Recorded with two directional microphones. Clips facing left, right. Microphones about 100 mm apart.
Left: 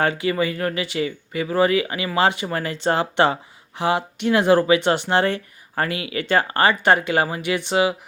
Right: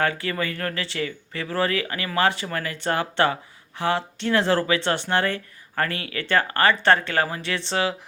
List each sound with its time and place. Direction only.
0.0 s speech: 20° left (ahead or behind)